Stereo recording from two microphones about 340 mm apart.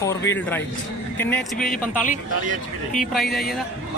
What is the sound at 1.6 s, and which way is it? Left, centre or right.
Speech, left.